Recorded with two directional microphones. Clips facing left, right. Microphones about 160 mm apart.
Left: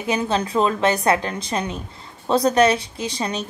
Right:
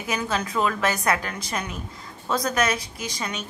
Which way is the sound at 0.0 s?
25° left (ahead or behind).